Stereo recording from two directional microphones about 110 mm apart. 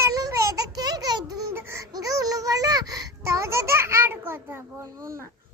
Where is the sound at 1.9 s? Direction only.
35° right (ahead or behind).